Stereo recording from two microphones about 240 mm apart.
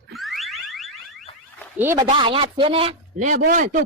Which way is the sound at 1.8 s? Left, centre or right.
Centre.